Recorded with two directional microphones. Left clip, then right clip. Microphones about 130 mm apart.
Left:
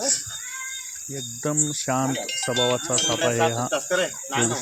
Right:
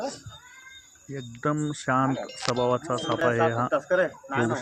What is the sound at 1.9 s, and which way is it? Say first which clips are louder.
Speech: right 2 dB; 30° left (ahead or behind).